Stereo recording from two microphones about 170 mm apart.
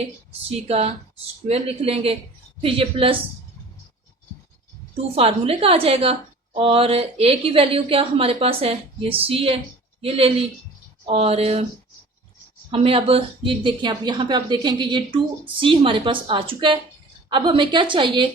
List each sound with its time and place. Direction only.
0.4 s a woman's voice: 35° right (ahead or behind)
5.1 s a woman's voice: 35° right (ahead or behind)
12.7 s speech: 35° right (ahead or behind)